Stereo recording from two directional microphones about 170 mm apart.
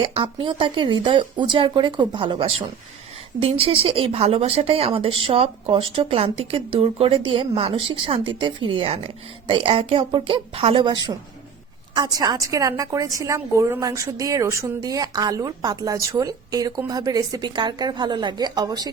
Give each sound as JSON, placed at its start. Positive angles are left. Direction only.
{"t": 0.1, "sound": "a woman's voice", "side_deg": -30}